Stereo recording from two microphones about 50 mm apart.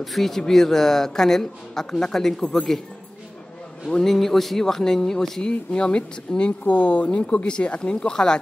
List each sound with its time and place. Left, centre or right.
0.0 s speech: centre
3.9 s speech: centre
5.5 s speech: left